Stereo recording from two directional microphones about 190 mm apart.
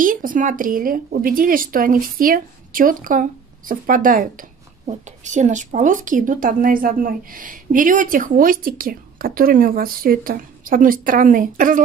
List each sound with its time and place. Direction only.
0.0 s a woman's voice: 45° right (ahead or behind)